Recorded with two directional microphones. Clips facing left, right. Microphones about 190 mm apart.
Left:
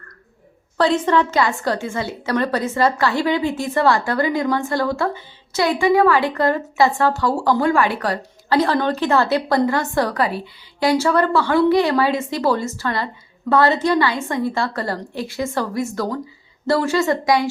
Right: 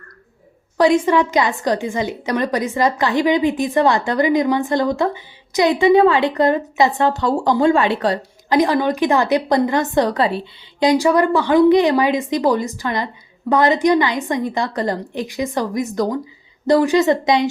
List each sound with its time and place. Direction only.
0.8 s a woman's voice: 10° right (ahead or behind)